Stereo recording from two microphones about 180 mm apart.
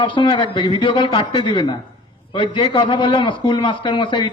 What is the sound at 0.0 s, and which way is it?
A man's voice, 25° left (ahead or behind).